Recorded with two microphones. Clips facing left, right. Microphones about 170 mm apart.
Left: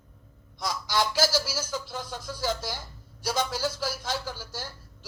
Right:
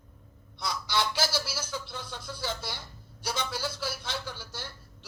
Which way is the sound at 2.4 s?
45° left (ahead or behind).